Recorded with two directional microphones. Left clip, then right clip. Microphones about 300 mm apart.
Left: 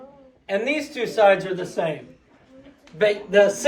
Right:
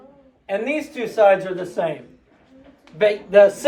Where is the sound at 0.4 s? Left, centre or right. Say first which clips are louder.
Even; centre.